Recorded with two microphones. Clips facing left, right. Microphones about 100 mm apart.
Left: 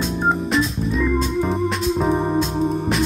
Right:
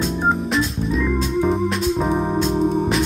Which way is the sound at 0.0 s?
Centre (ahead or behind).